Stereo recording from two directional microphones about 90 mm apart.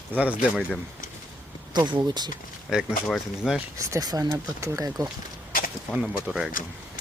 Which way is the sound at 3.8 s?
40° right (ahead or behind).